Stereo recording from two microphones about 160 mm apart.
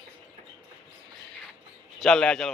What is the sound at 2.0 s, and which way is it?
Speech, 5° left (ahead or behind).